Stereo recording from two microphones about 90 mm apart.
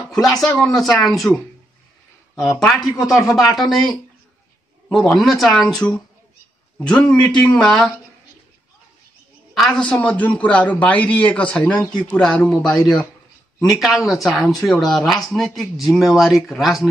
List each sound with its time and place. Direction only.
0.1 s speech: 5° left (ahead or behind)
2.6 s a man's voice: centre (ahead or behind)
9.5 s a man's voice: 5° left (ahead or behind)
13.7 s speech: 5° right (ahead or behind)